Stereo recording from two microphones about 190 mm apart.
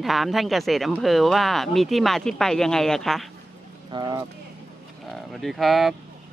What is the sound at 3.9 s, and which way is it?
Speech, 20° right (ahead or behind).